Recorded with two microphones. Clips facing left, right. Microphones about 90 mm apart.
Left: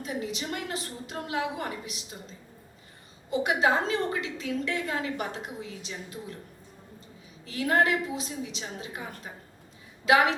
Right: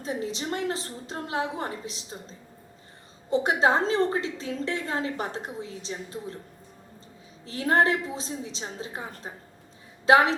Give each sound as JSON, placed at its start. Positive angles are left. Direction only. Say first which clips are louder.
{"t": 0.0, "sound": "a woman's voice", "louder": "right 2 dB", "side_deg": -30}
{"t": 3.2, "sound": "a woman's voice", "louder": "right 2 dB", "side_deg": -30}
{"t": 7.4, "sound": "a woman's voice", "louder": "right 2 dB", "side_deg": -35}